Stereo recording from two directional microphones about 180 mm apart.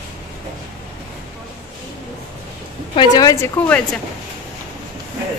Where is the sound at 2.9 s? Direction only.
20° left (ahead or behind).